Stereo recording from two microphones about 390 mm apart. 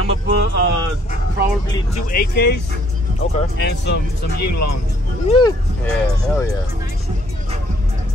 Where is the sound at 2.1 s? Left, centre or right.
Left.